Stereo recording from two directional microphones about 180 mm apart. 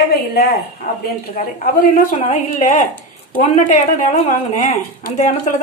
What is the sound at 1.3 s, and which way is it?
Speech, 45° left (ahead or behind).